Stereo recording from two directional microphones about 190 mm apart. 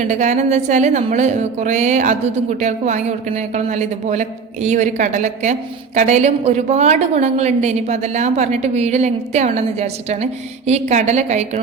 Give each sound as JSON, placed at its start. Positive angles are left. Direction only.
{"t": 0.0, "sound": "a woman's voice", "side_deg": -40}